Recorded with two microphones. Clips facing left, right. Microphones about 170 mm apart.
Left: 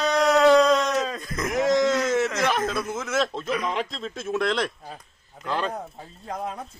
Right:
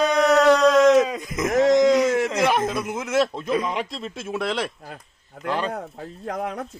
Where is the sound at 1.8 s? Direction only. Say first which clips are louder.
Right 4 dB; 15° right (ahead or behind).